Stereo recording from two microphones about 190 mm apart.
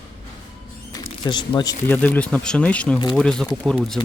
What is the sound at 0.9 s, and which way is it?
Speech, 25° left (ahead or behind).